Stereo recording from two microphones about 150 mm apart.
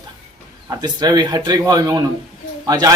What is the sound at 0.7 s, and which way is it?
Speech, 25° right (ahead or behind).